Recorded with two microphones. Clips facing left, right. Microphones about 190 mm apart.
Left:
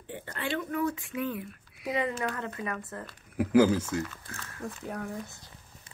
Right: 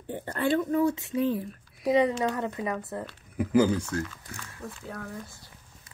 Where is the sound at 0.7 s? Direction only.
25° right (ahead or behind).